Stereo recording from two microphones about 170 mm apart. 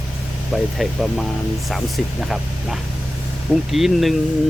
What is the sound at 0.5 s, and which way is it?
Speech, centre (ahead or behind).